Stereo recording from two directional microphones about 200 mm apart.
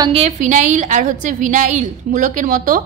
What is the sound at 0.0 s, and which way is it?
A woman's voice, 30° right (ahead or behind).